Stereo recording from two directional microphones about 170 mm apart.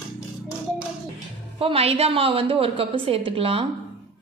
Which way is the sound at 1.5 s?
35° right (ahead or behind).